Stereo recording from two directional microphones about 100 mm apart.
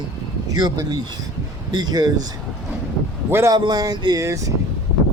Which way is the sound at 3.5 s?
45° right (ahead or behind).